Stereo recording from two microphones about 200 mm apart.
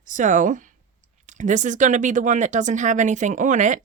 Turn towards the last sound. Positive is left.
turn(degrees=-40)  # may be behind; listen again after turning